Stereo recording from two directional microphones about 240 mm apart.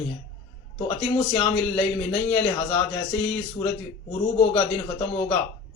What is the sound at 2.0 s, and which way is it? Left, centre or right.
Speech, left.